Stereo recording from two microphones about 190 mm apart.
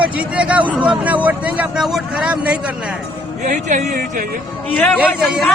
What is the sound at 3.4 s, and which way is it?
Speech, 40° right (ahead or behind).